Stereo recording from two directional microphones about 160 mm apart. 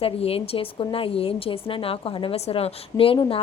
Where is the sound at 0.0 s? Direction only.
35° left (ahead or behind).